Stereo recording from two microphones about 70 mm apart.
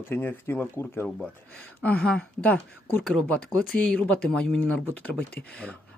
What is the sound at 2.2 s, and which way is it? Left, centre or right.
Speech, centre.